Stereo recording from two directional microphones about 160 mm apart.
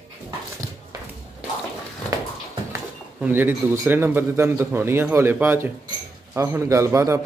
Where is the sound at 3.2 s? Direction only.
10° right (ahead or behind).